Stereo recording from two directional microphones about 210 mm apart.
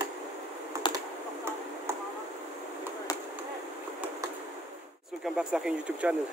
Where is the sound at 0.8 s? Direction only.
20° left (ahead or behind).